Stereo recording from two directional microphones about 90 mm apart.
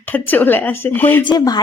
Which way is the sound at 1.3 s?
50° left (ahead or behind).